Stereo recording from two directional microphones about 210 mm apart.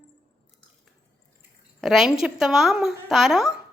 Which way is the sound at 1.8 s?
Centre (ahead or behind).